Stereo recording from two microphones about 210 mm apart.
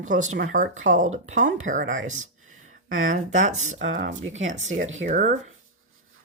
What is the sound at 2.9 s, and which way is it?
Speech, 65° right (ahead or behind).